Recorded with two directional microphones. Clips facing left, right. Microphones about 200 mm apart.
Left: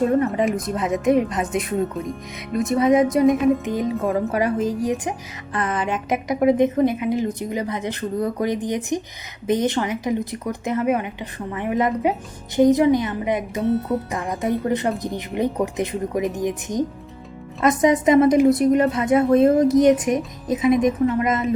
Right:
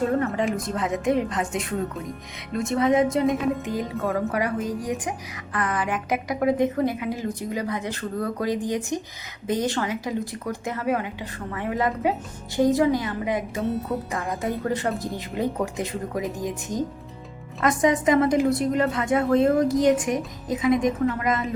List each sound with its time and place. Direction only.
0.2 s a woman's voice: 20° left (ahead or behind)
13.6 s speech: centre (ahead or behind)
14.6 s a woman's voice: 20° left (ahead or behind)